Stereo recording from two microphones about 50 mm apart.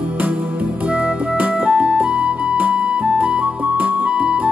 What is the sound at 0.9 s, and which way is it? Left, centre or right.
Music, right.